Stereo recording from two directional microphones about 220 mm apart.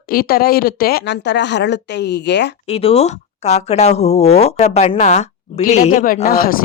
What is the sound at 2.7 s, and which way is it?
A woman's voice, 25° left (ahead or behind).